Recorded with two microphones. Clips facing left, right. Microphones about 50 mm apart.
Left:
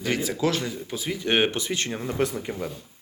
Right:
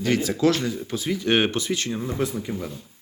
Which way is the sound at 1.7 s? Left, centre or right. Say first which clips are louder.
Right 2 dB; left.